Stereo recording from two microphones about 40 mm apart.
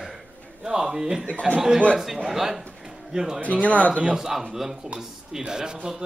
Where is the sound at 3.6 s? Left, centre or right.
Left.